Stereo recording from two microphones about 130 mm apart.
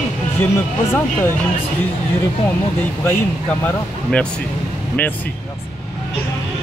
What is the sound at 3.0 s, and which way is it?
Speech, 15° left (ahead or behind).